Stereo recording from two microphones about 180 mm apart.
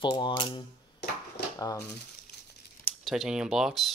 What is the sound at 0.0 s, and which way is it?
Speech, 25° left (ahead or behind).